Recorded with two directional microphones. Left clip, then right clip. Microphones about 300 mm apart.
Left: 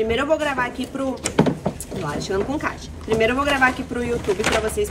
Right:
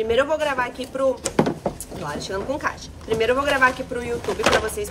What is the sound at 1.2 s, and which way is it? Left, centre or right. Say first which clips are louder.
Speech: left 1 dB; right.